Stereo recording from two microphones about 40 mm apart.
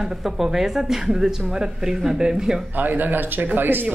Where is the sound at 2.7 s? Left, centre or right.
Right.